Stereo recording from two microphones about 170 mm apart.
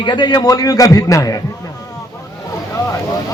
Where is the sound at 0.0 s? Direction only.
25° left (ahead or behind).